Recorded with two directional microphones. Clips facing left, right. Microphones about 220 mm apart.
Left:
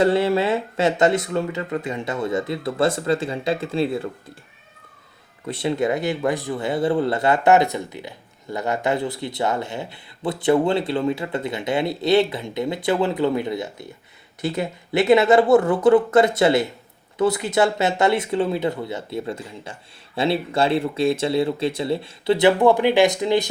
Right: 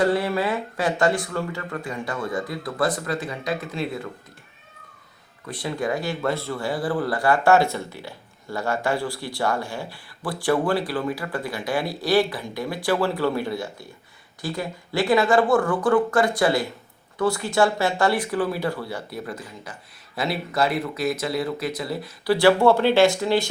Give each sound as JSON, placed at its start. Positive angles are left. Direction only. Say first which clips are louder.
{"t": 0.0, "sound": "speech", "louder": "left 4 dB", "side_deg": 25}
{"t": 5.5, "sound": "speech", "louder": "left 5 dB", "side_deg": 25}